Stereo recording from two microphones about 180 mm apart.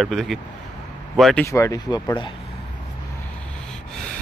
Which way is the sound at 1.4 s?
15° left (ahead or behind).